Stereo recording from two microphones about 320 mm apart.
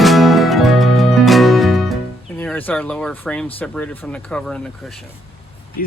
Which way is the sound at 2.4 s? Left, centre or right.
Centre.